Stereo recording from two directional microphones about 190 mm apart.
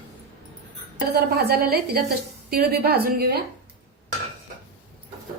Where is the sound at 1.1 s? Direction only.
55° right (ahead or behind).